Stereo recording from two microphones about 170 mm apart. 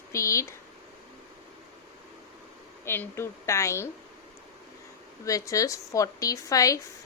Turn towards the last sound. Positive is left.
turn(degrees=20)  # may be behind; listen again after turning